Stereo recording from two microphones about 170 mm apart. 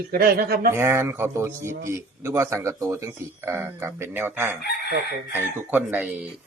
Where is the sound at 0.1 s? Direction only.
60° right (ahead or behind).